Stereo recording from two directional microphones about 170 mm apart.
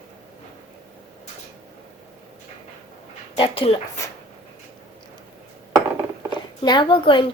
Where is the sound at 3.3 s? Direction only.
30° left (ahead or behind).